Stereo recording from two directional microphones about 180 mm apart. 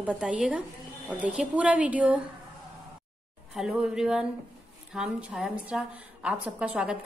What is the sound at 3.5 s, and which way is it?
A woman's voice, 5° right (ahead or behind).